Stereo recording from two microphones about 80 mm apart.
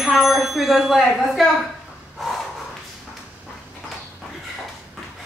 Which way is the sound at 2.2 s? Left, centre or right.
Centre.